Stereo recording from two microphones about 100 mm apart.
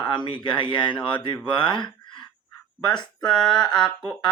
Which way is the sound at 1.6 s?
50° left (ahead or behind).